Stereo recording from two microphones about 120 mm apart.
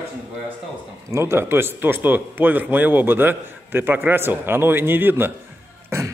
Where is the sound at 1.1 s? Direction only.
20° right (ahead or behind).